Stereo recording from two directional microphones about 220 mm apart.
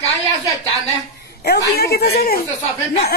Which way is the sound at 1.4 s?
45° left (ahead or behind).